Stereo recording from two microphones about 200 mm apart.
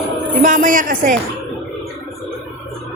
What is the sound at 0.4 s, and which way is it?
Speech, 40° right (ahead or behind).